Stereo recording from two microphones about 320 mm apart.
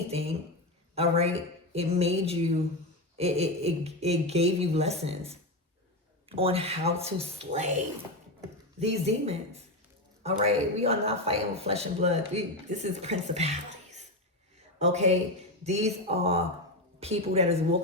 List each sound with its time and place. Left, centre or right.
0.1 s speech: centre
8.8 s speech: centre
14.8 s speech: right